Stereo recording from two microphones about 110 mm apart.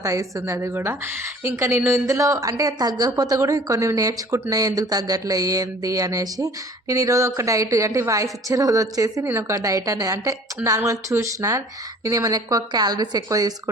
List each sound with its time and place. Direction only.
0.0 s a woman's voice: 30° right (ahead or behind)